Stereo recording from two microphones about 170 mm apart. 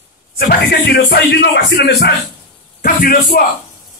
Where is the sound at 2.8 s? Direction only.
60° left (ahead or behind).